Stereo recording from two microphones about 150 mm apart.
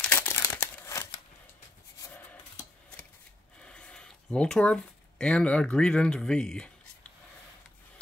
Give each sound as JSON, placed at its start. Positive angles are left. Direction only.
{"t": 0.0, "sound": "crumpling", "side_deg": 10}
{"t": 3.6, "sound": "speech", "side_deg": 5}